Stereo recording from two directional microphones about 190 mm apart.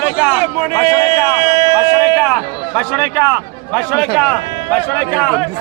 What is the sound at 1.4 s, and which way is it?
Speech, 20° right (ahead or behind).